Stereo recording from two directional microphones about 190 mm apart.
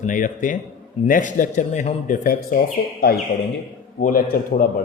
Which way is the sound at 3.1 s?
55° left (ahead or behind).